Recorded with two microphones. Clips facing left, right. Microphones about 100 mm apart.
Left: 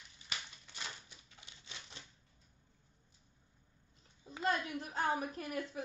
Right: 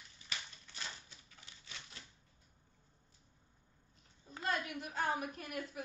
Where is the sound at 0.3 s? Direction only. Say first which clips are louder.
Left 1 dB; 20° left (ahead or behind).